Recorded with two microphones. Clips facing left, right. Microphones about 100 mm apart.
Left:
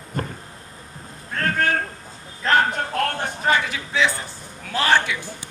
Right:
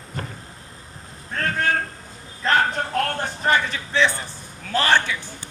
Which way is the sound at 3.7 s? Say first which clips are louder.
Right 1 dB; 5° left (ahead or behind).